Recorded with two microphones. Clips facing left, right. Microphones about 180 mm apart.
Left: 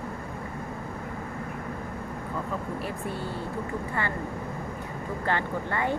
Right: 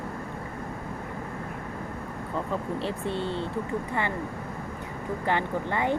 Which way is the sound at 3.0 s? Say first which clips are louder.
Right 3 dB; 25° right (ahead or behind).